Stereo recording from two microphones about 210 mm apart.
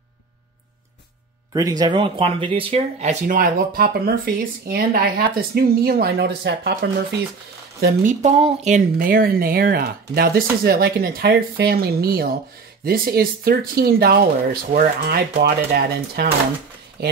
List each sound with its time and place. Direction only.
1.5 s speech: 15° right (ahead or behind); by 7.2 s 50° right (ahead or behind)
7.8 s speech: 40° right (ahead or behind)
8.9 s speech: 45° right (ahead or behind)